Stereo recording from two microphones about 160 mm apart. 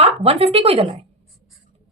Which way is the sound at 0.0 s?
40° right (ahead or behind).